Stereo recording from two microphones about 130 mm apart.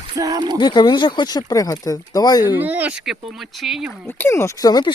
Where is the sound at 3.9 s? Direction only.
15° left (ahead or behind).